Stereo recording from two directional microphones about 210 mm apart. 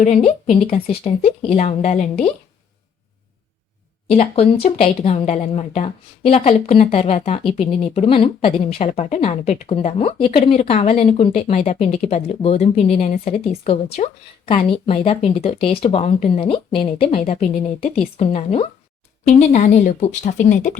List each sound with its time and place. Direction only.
0.0 s speech: 30° left (ahead or behind)
4.1 s speech: 30° left (ahead or behind)